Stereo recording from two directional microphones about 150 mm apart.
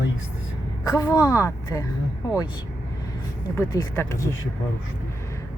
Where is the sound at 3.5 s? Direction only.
20° left (ahead or behind).